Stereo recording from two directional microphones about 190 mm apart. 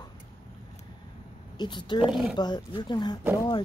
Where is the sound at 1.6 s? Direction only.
25° left (ahead or behind).